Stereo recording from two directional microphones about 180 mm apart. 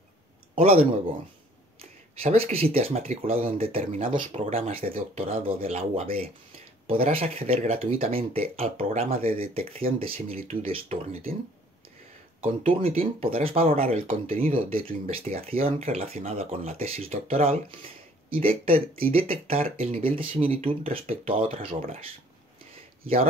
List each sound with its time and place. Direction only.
0.6 s speech: 30° right (ahead or behind)
9.1 s speech: 55° right (ahead or behind)
9.5 s speech: 30° right (ahead or behind)
12.6 s speech: 35° right (ahead or behind)